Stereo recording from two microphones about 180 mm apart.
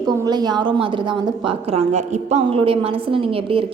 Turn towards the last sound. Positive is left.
turn(degrees=-30)  # may be behind; listen again after turning